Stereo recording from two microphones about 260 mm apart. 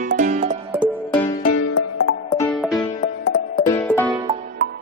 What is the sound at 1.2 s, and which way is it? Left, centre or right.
Music, centre.